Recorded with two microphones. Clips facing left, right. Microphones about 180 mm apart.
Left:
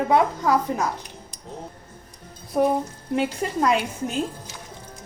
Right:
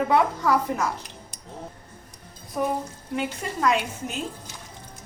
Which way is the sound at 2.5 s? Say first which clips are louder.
Left 6 dB; 30° left (ahead or behind).